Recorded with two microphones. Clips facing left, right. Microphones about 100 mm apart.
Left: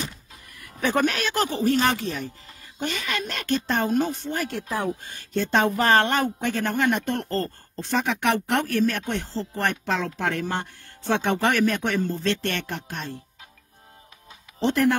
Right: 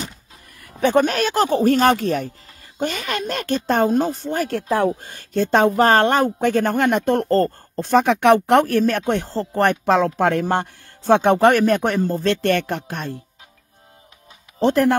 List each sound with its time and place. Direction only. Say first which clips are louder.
0.6 s speech: right 6 dB; 30° right (ahead or behind)
1.6 s speech: right 5 dB; 50° right (ahead or behind)
14.6 s speech: right 5 dB; 45° right (ahead or behind)